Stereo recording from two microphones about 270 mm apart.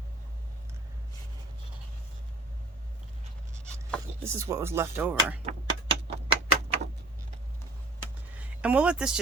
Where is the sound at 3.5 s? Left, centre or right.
Centre.